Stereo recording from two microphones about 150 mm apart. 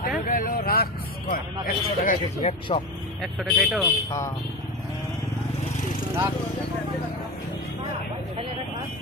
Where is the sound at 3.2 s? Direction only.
Centre (ahead or behind).